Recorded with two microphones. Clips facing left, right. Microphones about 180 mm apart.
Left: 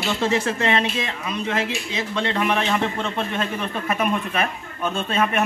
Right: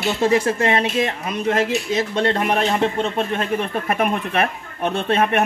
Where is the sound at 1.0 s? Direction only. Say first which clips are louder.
Right 5 dB; 50° right (ahead or behind); by 3.5 s 35° right (ahead or behind).